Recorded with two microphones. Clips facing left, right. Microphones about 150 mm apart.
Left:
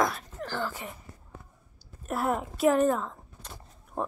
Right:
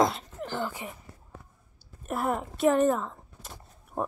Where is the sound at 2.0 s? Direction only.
Centre (ahead or behind).